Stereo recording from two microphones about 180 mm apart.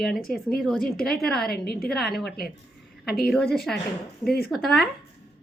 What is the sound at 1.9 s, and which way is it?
Speech, centre (ahead or behind).